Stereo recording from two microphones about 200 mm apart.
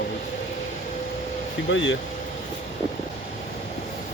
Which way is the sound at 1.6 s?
70° left (ahead or behind).